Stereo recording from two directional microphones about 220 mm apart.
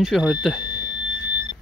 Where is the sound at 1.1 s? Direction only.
20° left (ahead or behind).